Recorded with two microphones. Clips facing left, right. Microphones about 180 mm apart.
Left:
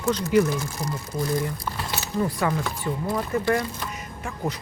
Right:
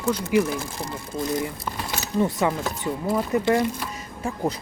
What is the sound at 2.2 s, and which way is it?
A woman's voice, 25° right (ahead or behind).